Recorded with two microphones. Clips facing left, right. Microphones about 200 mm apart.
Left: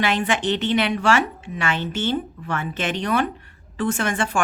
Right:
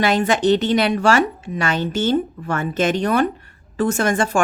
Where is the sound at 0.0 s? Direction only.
40° right (ahead or behind).